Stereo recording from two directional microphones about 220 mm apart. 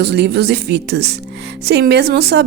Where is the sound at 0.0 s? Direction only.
45° right (ahead or behind).